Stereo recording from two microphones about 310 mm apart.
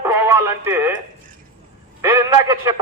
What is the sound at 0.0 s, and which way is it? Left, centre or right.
Radio, centre.